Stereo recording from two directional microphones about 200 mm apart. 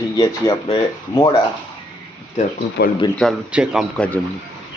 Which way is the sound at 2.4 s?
35° left (ahead or behind).